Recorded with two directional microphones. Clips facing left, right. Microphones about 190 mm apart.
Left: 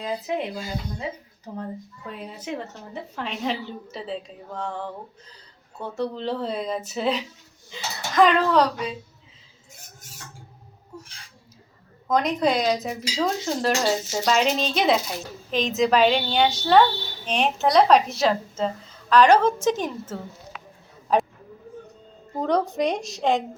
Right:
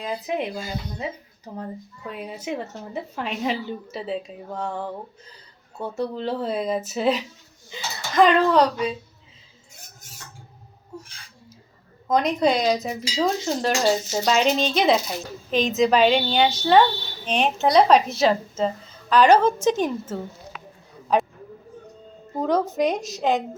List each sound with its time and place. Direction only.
0.0 s a woman's voice: 15° right (ahead or behind)
2.0 s a woman's voice: 10° right (ahead or behind)
5.8 s dishes: 10° right (ahead or behind)
12.0 s dishes: centre (ahead or behind)
21.1 s a sound: centre (ahead or behind)
22.3 s dishes: centre (ahead or behind)